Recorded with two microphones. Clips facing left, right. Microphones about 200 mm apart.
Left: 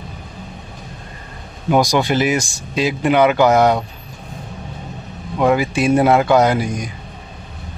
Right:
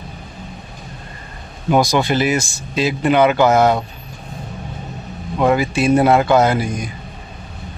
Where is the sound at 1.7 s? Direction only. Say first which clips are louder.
Even; 15° left (ahead or behind).